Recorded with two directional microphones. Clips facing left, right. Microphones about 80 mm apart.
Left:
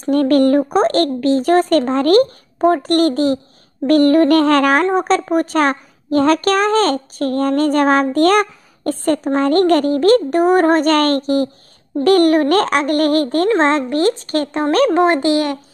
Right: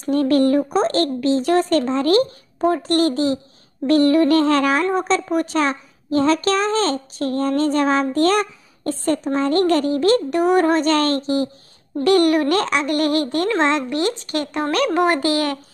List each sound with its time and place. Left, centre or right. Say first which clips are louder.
0.1 s a woman's voice: left 4 dB; left
3.8 s music: left 3 dB; left
4.9 s a woman's voice: left 4 dB; left